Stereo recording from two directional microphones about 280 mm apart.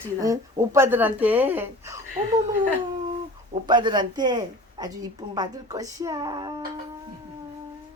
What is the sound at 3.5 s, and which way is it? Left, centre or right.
A woman's voice, centre.